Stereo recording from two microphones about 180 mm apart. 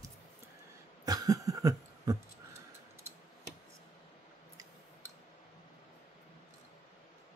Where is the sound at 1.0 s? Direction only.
20° right (ahead or behind).